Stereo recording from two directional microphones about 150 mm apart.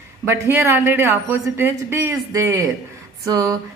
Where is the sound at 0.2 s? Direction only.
15° right (ahead or behind).